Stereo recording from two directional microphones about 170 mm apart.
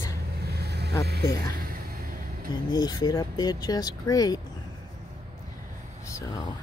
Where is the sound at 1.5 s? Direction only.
60° right (ahead or behind).